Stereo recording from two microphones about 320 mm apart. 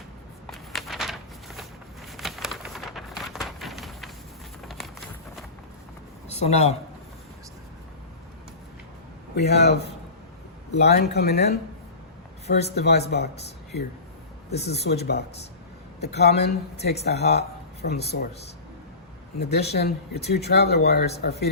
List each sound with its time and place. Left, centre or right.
0.4 s walk: centre
2.1 s a sound: centre
6.2 s speech: centre
9.3 s speech: left
14.6 s speech: left
19.4 s speech: left